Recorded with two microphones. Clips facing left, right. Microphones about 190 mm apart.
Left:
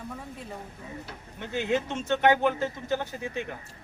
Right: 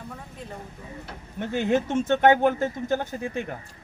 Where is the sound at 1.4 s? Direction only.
50° right (ahead or behind).